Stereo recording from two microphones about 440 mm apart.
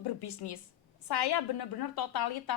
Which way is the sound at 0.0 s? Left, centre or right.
Left.